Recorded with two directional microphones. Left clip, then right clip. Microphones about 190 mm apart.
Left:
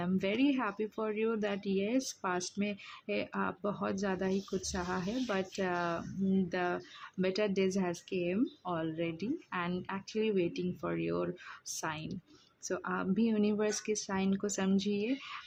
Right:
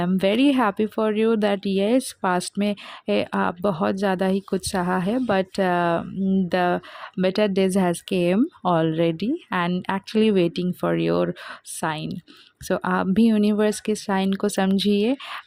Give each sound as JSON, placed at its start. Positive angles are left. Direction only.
{"t": 0.0, "sound": "speech", "side_deg": -45}